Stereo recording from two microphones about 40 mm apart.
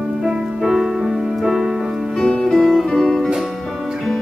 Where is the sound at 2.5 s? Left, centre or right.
Centre.